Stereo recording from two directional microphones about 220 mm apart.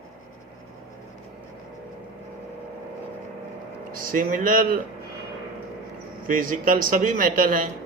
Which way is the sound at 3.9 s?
40° right (ahead or behind).